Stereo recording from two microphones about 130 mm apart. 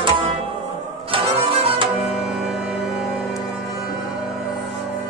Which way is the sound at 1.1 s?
45° right (ahead or behind).